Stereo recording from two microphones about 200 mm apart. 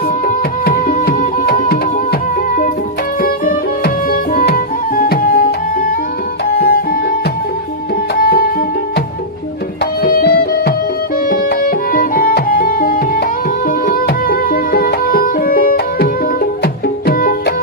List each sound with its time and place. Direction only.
0.3 s music: 45° left (ahead or behind)
3.2 s music: 45° left (ahead or behind)
6.6 s music: 50° left (ahead or behind)
8.2 s music: 45° left (ahead or behind)
10.0 s music: 50° left (ahead or behind)